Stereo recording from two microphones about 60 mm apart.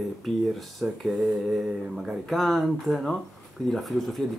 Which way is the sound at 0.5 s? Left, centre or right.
Centre.